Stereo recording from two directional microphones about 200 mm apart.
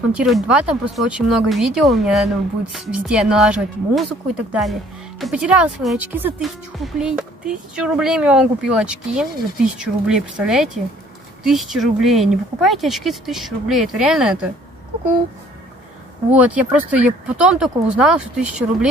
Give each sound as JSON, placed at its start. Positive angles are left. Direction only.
{"t": 0.1, "sound": "speech", "side_deg": -5}
{"t": 16.3, "sound": "speech", "side_deg": -5}